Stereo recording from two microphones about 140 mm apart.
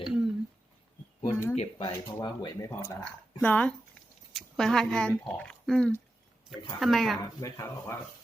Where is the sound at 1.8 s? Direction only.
30° left (ahead or behind).